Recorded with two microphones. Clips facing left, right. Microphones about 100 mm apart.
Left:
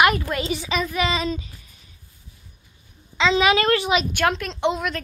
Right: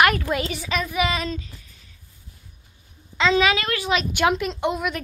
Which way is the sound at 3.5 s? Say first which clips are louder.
Left 7 dB; 35° left (ahead or behind).